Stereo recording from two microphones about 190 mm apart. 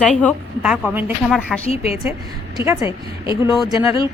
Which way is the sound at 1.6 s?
35° left (ahead or behind).